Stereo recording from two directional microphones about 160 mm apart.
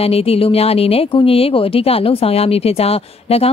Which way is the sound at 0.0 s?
35° left (ahead or behind).